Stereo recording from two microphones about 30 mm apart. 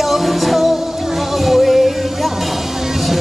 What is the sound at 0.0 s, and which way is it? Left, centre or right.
Music, centre.